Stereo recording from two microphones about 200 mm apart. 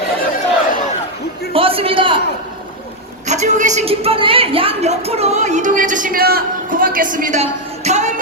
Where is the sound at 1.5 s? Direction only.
30° right (ahead or behind).